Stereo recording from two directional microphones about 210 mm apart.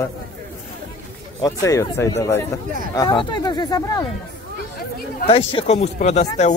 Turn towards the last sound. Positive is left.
turn(degrees=30)  # may be behind; listen again after turning